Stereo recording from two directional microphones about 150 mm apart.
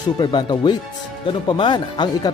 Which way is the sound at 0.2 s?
30° left (ahead or behind).